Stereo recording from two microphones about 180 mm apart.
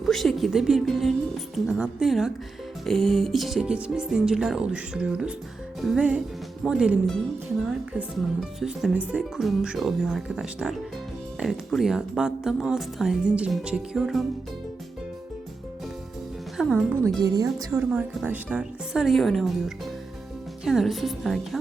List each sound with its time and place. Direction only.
0.0 s speech: centre (ahead or behind)
16.6 s music: centre (ahead or behind)
17.2 s speech: 20° right (ahead or behind)
17.7 s speech: 5° right (ahead or behind)